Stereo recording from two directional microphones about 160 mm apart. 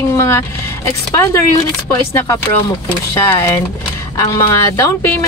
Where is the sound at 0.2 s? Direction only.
15° left (ahead or behind).